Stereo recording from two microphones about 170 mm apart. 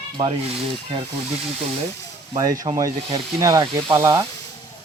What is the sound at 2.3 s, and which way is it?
Speech, 20° right (ahead or behind).